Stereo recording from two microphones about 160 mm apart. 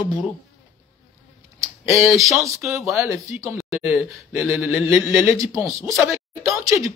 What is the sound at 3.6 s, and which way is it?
Speech, centre (ahead or behind).